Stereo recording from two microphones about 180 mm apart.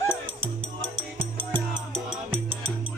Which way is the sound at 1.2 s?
30° right (ahead or behind).